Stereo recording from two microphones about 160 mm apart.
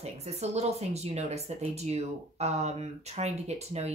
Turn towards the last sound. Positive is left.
turn(degrees=-40)  # may be behind; listen again after turning